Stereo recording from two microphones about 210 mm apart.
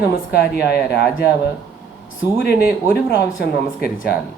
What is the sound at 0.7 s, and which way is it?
Speech, 50° left (ahead or behind).